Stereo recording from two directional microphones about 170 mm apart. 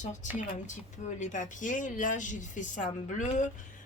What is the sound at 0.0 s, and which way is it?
Speech, 45° left (ahead or behind).